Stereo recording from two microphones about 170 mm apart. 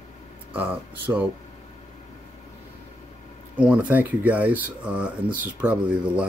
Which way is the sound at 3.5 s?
5° right (ahead or behind).